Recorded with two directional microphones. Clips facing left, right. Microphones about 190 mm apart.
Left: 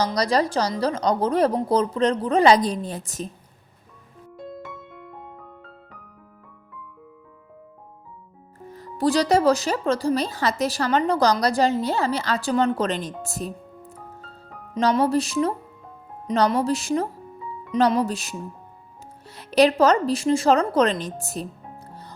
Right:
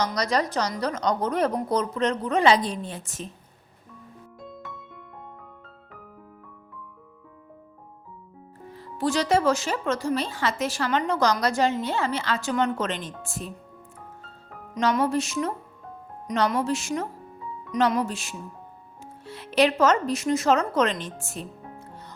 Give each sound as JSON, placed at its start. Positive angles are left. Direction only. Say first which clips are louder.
{"t": 0.0, "sound": "speech", "louder": "left 4 dB", "side_deg": 35}
{"t": 4.4, "sound": "music", "louder": "left 5 dB", "side_deg": 0}
{"t": 8.7, "sound": "speech", "louder": "left 4 dB", "side_deg": 40}
{"t": 14.8, "sound": "speech", "louder": "left 3 dB", "side_deg": 35}